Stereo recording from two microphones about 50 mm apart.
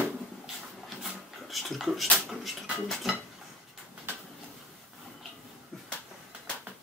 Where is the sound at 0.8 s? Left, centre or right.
Centre.